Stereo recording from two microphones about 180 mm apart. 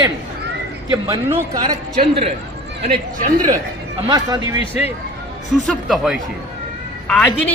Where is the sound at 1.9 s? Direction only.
35° right (ahead or behind).